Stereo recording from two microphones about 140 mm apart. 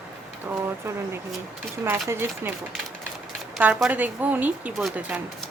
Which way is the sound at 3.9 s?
10° right (ahead or behind).